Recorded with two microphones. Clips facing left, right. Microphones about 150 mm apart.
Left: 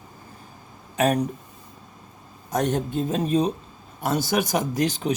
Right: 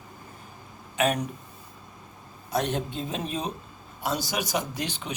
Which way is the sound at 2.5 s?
45° left (ahead or behind).